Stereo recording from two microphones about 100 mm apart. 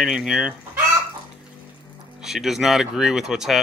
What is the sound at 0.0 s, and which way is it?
Speech, 5° right (ahead or behind).